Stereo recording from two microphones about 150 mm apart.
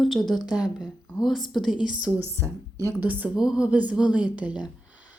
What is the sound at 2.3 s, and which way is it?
A woman's voice, 20° right (ahead or behind).